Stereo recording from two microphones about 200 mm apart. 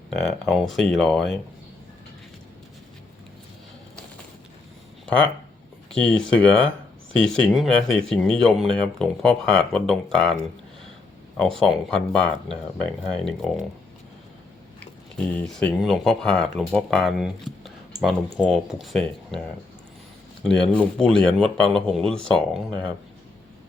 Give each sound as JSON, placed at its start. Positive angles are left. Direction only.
{"t": 0.1, "sound": "speech", "side_deg": 5}
{"t": 5.0, "sound": "speech", "side_deg": 5}
{"t": 11.3, "sound": "speech", "side_deg": 5}
{"t": 15.1, "sound": "speech", "side_deg": 5}
{"t": 20.4, "sound": "speech", "side_deg": 5}